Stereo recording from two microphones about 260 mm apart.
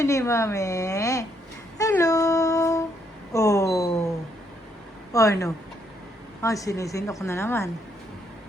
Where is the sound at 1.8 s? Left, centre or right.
Centre.